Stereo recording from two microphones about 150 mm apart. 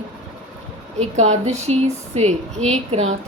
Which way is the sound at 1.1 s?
50° right (ahead or behind).